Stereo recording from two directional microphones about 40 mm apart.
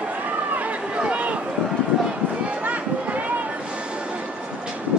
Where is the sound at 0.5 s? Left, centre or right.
Right.